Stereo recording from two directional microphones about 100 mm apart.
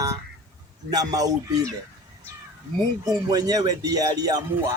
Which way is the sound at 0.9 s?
40° right (ahead or behind).